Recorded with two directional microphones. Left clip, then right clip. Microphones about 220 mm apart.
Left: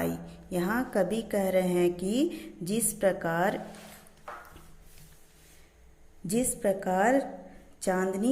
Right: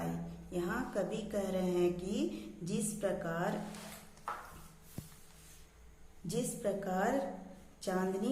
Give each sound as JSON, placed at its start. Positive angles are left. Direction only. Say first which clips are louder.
{"t": 0.5, "sound": "a woman's voice", "louder": "left 8 dB", "side_deg": 35}
{"t": 6.2, "sound": "a woman's voice", "louder": "left 8 dB", "side_deg": 35}